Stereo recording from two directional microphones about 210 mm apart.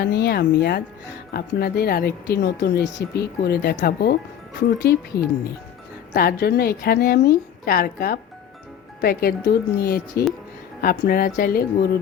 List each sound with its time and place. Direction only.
0.0 s speech: 50° left (ahead or behind)
6.1 s speech: 50° left (ahead or behind)